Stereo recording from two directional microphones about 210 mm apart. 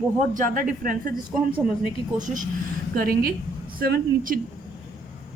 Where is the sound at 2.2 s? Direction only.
40° right (ahead or behind).